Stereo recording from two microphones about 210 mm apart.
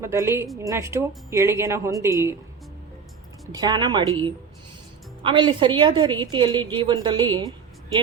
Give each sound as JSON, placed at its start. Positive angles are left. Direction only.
{"t": 0.0, "sound": "speech", "side_deg": -15}
{"t": 3.5, "sound": "a woman's voice", "side_deg": -20}